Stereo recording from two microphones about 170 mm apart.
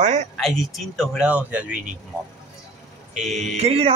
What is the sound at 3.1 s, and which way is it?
Speech, centre (ahead or behind).